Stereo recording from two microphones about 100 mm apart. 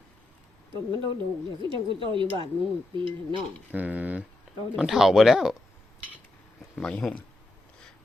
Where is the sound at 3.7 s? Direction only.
15° right (ahead or behind).